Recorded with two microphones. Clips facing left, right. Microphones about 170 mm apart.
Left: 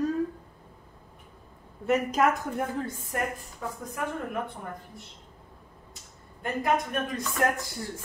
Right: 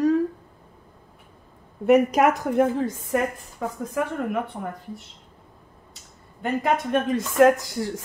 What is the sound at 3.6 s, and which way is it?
Speech, 90° right.